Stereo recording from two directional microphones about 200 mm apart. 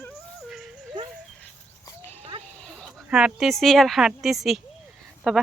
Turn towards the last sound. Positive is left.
turn(degrees=0)  # may be behind; listen again after turning